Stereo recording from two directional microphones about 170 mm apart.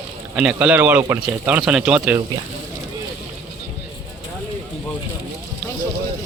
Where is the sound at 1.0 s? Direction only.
20° right (ahead or behind).